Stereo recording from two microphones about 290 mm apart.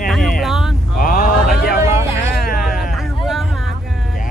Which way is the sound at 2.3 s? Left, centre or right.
Left.